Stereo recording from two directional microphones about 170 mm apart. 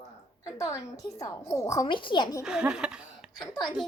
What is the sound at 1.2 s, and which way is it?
A woman's voice, 15° left (ahead or behind).